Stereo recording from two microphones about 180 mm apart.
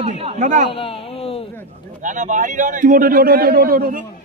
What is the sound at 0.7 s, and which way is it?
Speech, 30° left (ahead or behind).